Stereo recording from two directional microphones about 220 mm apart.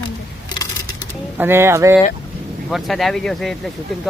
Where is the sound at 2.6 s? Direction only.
Centre (ahead or behind).